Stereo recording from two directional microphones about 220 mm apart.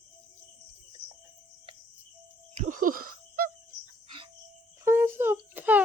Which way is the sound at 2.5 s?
35° right (ahead or behind).